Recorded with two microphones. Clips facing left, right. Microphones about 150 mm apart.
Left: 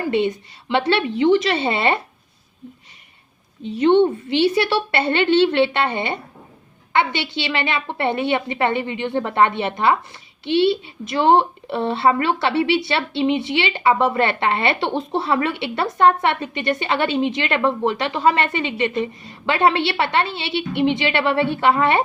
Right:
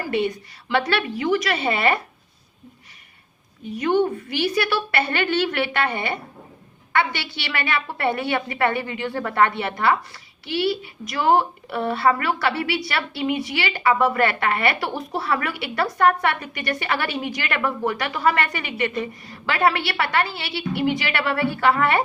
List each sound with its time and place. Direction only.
0.0 s speech: 20° left (ahead or behind)
3.6 s speech: 25° left (ahead or behind)